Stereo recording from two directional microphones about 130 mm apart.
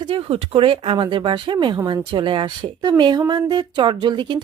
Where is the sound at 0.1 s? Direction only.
50° right (ahead or behind).